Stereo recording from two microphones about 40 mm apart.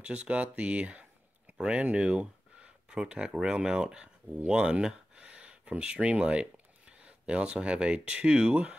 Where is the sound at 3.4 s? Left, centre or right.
Centre.